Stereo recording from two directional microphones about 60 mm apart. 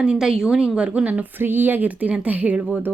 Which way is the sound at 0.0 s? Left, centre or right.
Centre.